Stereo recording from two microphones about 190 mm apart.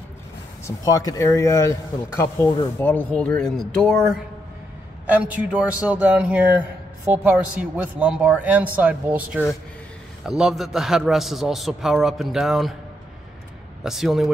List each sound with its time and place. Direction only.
0.7 s a man's voice: 20° left (ahead or behind); by 12.7 s centre (ahead or behind)
13.8 s a man's voice: centre (ahead or behind)